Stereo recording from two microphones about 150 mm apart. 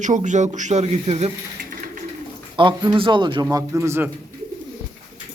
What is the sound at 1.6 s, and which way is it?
Bird, 65° right (ahead or behind).